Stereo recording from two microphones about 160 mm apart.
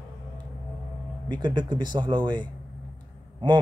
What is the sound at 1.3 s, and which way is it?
A man's voice, 30° right (ahead or behind).